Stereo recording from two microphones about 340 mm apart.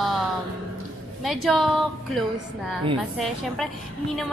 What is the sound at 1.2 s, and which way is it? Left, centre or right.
A woman's voice, centre.